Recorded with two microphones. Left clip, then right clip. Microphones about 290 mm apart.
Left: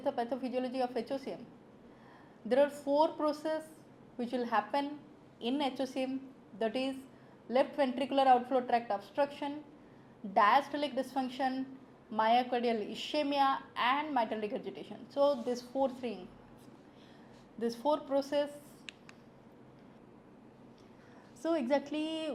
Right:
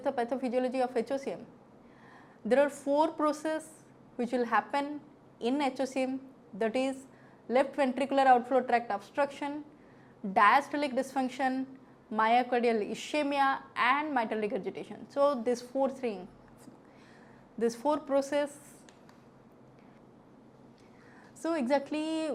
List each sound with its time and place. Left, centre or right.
0.0 s a woman's voice: right
2.5 s a woman's voice: right
17.6 s a woman's voice: right
21.4 s a woman's voice: right